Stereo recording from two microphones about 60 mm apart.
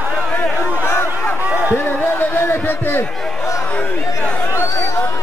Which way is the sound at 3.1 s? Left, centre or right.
Centre.